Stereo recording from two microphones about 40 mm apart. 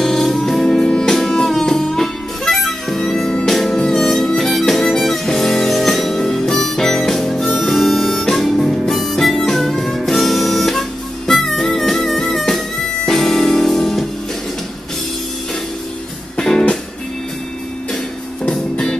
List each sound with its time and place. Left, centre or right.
0.0 s music: centre
10.0 s harmonica: centre
12.8 s music: centre
16.3 s music: centre
18.5 s music: centre